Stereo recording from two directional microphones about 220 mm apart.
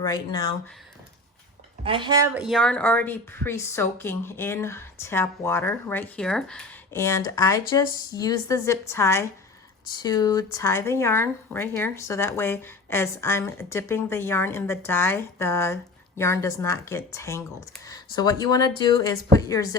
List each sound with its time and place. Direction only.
0.0 s speech: 15° left (ahead or behind)
1.8 s speech: 20° right (ahead or behind)
2.3 s speech: centre (ahead or behind); by 19.7 s 15° left (ahead or behind)